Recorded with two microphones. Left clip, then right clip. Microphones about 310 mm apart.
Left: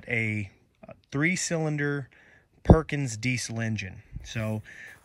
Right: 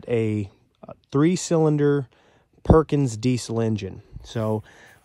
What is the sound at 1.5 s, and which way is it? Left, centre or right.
Speech, left.